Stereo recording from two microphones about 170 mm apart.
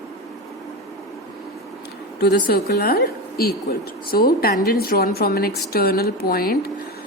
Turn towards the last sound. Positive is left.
turn(degrees=60)  # may be behind; listen again after turning